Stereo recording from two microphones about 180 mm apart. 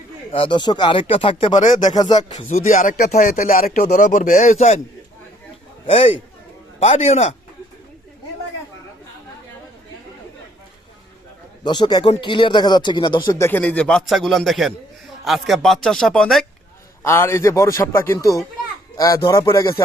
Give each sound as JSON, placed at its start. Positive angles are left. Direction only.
{"t": 0.3, "sound": "speech", "side_deg": 30}
{"t": 2.0, "sound": "speech", "side_deg": 25}
{"t": 2.5, "sound": "speech", "side_deg": 40}
{"t": 5.8, "sound": "a man's voice", "side_deg": 30}
{"t": 11.6, "sound": "speech", "side_deg": 25}
{"t": 17.0, "sound": "a man's voice", "side_deg": 15}